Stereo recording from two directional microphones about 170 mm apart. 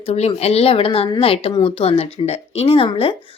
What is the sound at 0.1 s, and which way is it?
Speech, 40° left (ahead or behind).